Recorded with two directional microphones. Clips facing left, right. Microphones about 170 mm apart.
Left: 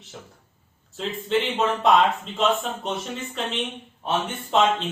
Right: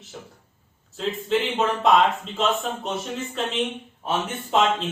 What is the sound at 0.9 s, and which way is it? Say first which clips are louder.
Speech: right 1 dB; centre (ahead or behind).